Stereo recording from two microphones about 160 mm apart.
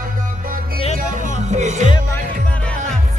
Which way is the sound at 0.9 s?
55° right (ahead or behind).